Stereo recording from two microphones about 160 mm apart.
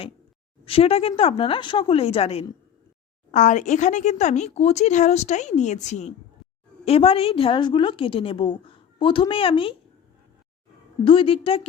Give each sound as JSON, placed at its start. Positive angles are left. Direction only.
{"t": 0.6, "sound": "a woman's voice", "side_deg": 35}
{"t": 3.3, "sound": "a woman's voice", "side_deg": 50}
{"t": 11.0, "sound": "a woman's voice", "side_deg": 35}